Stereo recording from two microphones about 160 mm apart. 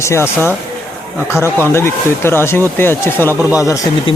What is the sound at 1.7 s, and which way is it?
Speech, 15° left (ahead or behind).